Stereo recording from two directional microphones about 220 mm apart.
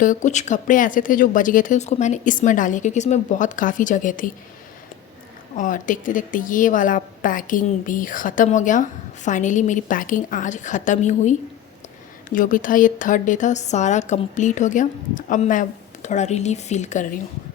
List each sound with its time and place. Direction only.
0.0 s a woman's voice: 35° left (ahead or behind)
5.5 s a woman's voice: 35° left (ahead or behind)